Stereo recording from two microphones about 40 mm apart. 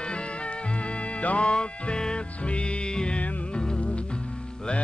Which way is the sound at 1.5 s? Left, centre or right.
Left.